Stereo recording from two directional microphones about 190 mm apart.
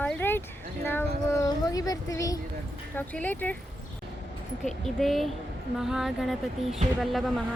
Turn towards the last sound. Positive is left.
turn(degrees=0)  # may be behind; listen again after turning